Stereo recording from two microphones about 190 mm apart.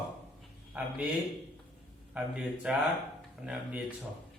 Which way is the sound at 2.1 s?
5° right (ahead or behind).